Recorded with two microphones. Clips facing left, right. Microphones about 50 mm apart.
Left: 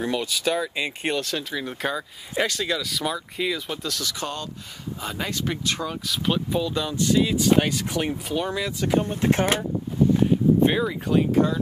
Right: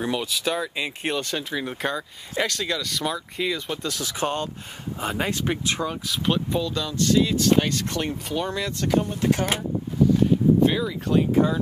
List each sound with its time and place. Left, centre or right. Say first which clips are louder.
0.0 s speech: left 1 dB; centre
4.0 s speech: right 4 dB; right
5.4 s speech: right 2 dB; centre
6.6 s speech: left 1 dB; centre
9.0 s speech: left 1 dB; left
10.6 s speech: even; left
11.1 s speech: right 1 dB; centre